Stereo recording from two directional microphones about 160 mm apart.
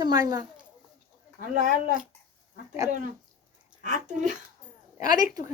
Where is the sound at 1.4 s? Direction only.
55° right (ahead or behind).